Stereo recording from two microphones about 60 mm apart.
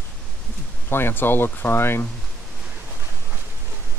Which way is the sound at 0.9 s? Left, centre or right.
Left.